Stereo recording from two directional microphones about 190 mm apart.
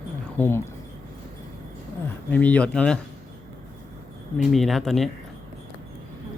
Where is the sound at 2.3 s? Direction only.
10° left (ahead or behind).